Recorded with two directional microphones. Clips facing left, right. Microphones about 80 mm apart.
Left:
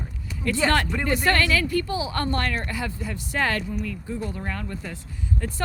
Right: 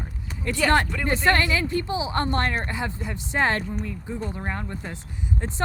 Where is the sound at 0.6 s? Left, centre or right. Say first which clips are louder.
Right 2 dB; centre.